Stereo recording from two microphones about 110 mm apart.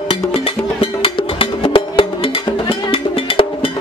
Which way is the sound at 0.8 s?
55° left (ahead or behind).